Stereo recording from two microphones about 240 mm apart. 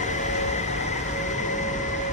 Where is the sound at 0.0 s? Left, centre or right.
Left.